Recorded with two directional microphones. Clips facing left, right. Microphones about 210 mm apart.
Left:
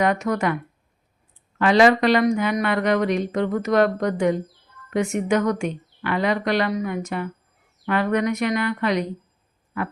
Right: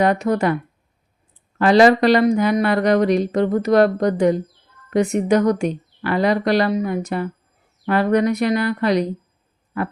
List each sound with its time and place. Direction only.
0.0 s speech: 35° right (ahead or behind)
1.5 s speech: 35° right (ahead or behind)